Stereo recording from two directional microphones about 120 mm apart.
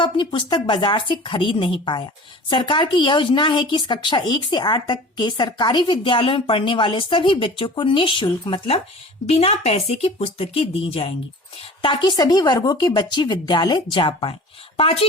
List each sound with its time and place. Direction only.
0.0 s speech: 40° left (ahead or behind)
9.2 s a woman's voice: 60° left (ahead or behind); by 14.3 s 45° left (ahead or behind)
14.8 s a woman's voice: 55° left (ahead or behind)